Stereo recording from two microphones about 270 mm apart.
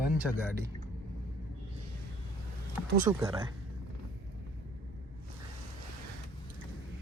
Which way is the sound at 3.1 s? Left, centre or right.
Centre.